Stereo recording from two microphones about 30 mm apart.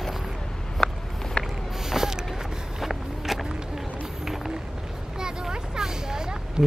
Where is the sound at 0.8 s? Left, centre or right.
Left.